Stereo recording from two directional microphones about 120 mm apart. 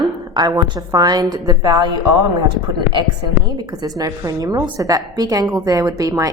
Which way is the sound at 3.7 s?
35° right (ahead or behind).